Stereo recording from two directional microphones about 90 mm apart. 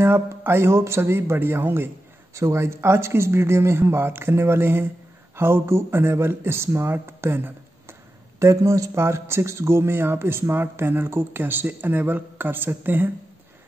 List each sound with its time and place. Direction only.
0.0 s speech: 25° right (ahead or behind)